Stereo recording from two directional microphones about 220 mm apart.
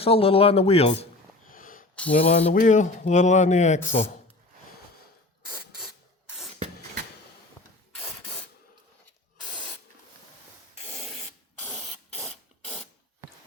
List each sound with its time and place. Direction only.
0.0 s speech: 25° left (ahead or behind)
1.5 s a sound: 40° left (ahead or behind)
2.1 s speech: 25° left (ahead or behind)
3.8 s speech: 10° left (ahead or behind)
5.8 s rub: centre (ahead or behind)
11.6 s spray: centre (ahead or behind)